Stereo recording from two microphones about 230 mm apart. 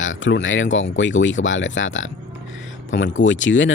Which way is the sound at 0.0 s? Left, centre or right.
Left.